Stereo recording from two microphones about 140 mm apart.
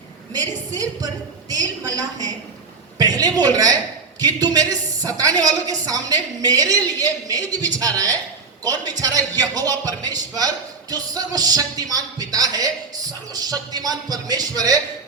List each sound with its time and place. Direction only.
0.3 s speech: 25° right (ahead or behind)